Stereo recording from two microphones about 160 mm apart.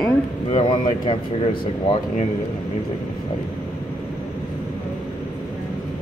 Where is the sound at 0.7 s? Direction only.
30° left (ahead or behind).